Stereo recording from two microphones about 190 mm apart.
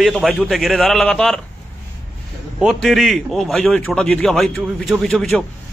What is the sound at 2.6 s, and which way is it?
A man's voice, centre (ahead or behind).